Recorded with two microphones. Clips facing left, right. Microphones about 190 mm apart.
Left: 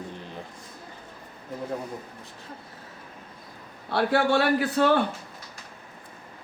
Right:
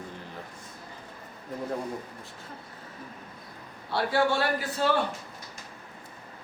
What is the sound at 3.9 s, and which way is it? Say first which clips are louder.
Speech: left 3 dB; 60° left (ahead or behind).